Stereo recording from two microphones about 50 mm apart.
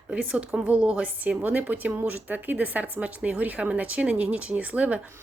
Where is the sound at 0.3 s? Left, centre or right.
Right.